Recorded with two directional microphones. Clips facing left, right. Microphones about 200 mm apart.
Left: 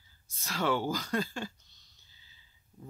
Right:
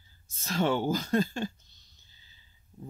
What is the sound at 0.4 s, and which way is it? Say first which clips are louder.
Speech: right 3 dB; 25° right (ahead or behind).